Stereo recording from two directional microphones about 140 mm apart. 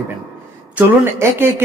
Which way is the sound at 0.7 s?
15° right (ahead or behind).